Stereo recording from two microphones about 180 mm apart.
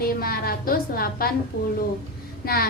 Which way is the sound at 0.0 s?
55° left (ahead or behind).